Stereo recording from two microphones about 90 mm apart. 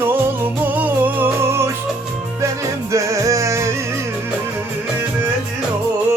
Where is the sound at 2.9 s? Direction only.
35° right (ahead or behind).